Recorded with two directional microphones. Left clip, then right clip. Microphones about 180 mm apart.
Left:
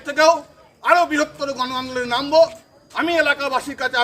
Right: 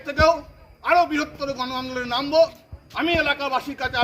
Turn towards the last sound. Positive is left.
turn(degrees=10)  # may be behind; listen again after turning